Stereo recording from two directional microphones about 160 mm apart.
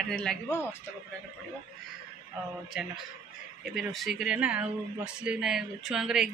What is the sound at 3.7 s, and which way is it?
Speech, centre (ahead or behind).